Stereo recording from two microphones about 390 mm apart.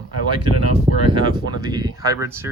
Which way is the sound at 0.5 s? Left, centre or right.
Right.